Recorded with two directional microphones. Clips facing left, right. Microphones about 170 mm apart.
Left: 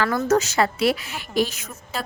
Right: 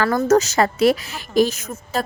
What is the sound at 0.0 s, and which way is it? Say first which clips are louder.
A woman's voice: right 4 dB; 40° right (ahead or behind).